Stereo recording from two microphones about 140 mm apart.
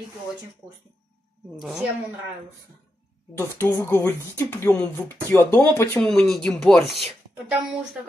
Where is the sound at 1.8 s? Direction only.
10° right (ahead or behind).